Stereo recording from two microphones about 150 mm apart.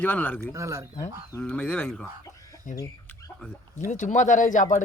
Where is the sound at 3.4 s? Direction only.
10° left (ahead or behind).